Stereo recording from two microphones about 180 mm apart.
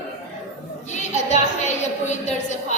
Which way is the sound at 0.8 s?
40° left (ahead or behind).